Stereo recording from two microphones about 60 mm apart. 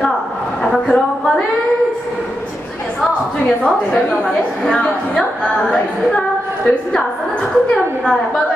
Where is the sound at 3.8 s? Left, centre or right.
Centre.